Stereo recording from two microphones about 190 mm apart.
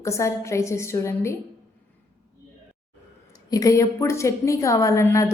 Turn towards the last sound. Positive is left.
turn(degrees=15)  # may be behind; listen again after turning